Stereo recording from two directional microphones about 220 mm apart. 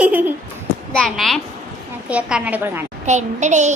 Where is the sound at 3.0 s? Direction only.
30° right (ahead or behind).